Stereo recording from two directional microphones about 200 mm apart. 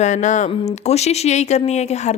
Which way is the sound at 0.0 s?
35° left (ahead or behind).